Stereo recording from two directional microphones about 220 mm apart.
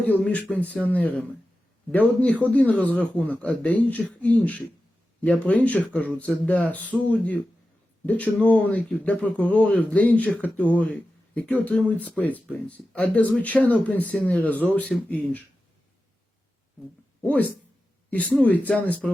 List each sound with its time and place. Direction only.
0.0 s speech: 5° left (ahead or behind)
18.3 s speech: 5° left (ahead or behind)